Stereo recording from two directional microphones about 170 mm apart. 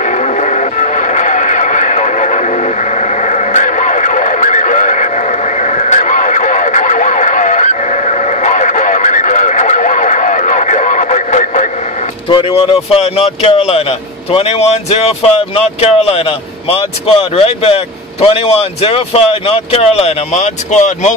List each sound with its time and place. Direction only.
0.0 s radio: 45° left (ahead or behind)
12.3 s speech: 30° left (ahead or behind)